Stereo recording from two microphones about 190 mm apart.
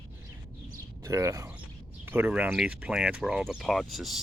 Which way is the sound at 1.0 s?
15° right (ahead or behind).